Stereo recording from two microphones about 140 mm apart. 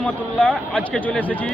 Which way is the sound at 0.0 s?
10° left (ahead or behind).